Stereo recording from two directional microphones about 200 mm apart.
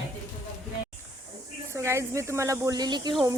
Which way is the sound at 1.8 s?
15° right (ahead or behind).